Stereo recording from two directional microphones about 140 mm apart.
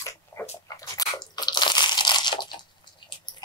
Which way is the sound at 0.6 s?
25° left (ahead or behind).